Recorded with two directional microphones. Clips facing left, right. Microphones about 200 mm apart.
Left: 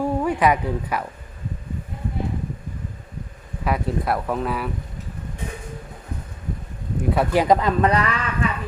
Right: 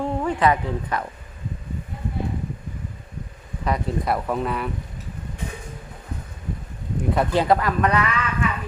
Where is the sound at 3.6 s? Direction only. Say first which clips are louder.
Left 1 dB; 5° left (ahead or behind).